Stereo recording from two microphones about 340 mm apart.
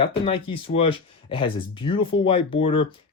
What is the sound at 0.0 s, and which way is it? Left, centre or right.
Speech, centre.